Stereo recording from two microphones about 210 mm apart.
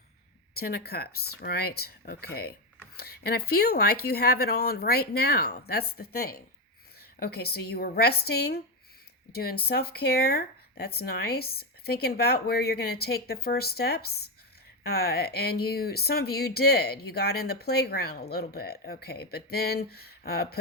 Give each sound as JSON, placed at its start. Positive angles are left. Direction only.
{"t": 0.5, "sound": "speech", "side_deg": 45}